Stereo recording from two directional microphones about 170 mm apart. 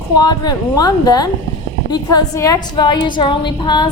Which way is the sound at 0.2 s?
25° left (ahead or behind).